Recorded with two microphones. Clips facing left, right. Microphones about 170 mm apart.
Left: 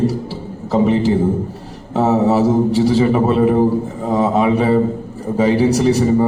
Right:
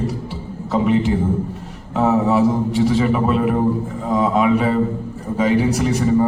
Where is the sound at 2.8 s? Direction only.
30° left (ahead or behind).